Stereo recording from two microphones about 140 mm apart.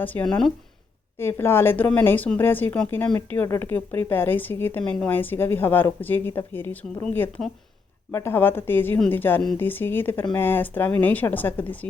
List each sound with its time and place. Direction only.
0.0 s speech: 10° left (ahead or behind)
1.2 s speech: 15° left (ahead or behind)